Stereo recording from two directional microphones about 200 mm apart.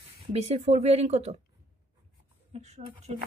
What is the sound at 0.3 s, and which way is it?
Speech, 30° right (ahead or behind).